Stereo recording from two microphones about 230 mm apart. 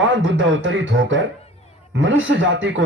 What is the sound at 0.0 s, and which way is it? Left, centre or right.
Speech, right.